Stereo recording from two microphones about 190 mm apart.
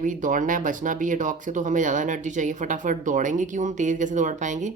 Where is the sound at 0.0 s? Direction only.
45° right (ahead or behind).